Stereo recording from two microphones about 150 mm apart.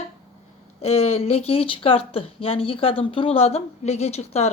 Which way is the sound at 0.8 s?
45° left (ahead or behind).